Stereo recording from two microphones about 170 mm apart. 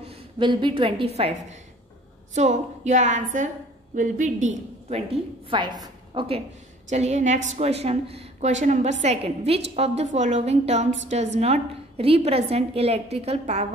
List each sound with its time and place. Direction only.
0.0 s a woman's voice: 30° right (ahead or behind)